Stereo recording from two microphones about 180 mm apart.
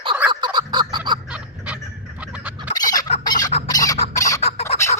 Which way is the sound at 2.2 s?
5° right (ahead or behind).